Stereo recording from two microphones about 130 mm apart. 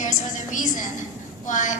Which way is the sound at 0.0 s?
70° left (ahead or behind).